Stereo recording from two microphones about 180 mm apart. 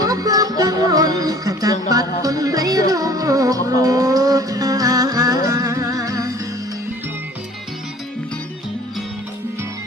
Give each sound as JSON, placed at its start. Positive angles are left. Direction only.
{"t": 0.0, "sound": "music", "side_deg": -20}